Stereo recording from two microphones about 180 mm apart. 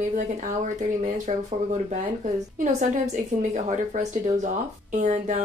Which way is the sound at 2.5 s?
45° right (ahead or behind).